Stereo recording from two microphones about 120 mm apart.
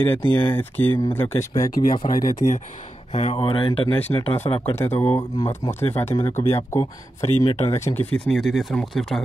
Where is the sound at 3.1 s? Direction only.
65° left (ahead or behind).